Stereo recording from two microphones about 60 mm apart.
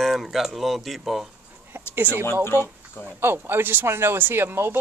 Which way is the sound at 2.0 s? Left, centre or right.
Right.